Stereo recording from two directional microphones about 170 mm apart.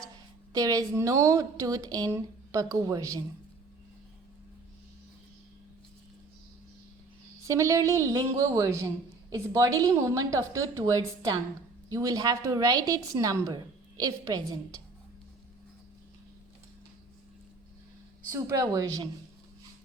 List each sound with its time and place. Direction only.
0.5 s a woman's voice: 20° right (ahead or behind)
7.4 s a woman's voice: 20° right (ahead or behind)
18.3 s a woman's voice: 20° right (ahead or behind)